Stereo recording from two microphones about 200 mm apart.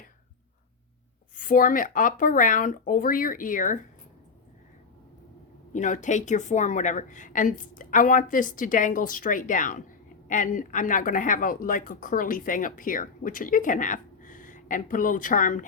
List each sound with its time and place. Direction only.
1.4 s speech: 40° left (ahead or behind)
5.7 s speech: 40° left (ahead or behind)